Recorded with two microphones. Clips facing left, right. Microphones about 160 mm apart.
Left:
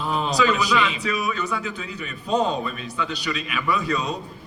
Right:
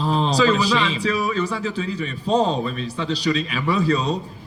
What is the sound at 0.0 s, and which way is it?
A man's voice, 30° right (ahead or behind).